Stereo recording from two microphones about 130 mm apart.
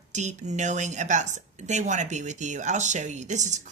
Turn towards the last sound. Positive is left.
turn(degrees=-65)  # may be behind; listen again after turning